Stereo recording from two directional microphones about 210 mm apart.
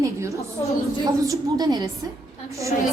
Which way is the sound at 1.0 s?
15° right (ahead or behind).